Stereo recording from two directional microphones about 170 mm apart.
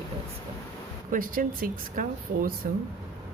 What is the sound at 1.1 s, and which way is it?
Speech, 55° right (ahead or behind).